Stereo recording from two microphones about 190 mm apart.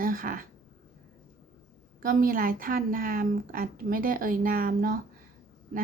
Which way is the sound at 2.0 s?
50° right (ahead or behind).